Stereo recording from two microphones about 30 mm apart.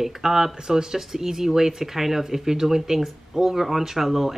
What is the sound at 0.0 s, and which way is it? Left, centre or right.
Speech, centre.